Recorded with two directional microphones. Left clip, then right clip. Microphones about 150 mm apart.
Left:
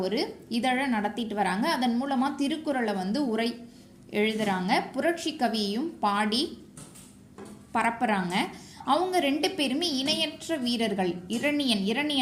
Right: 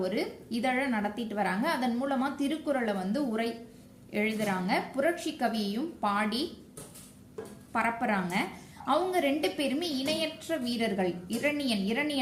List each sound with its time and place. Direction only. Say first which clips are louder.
0.0 s a woman's voice: left 3 dB; 35° left (ahead or behind)
7.7 s a woman's voice: left 3 dB; 40° left (ahead or behind)